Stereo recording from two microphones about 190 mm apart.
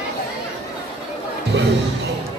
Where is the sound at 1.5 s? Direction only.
65° right (ahead or behind).